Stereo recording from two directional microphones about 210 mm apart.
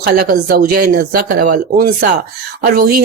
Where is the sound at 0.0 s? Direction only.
45° right (ahead or behind).